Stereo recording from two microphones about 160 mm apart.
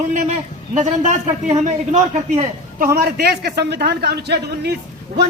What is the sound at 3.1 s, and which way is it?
A man's voice, 90° right.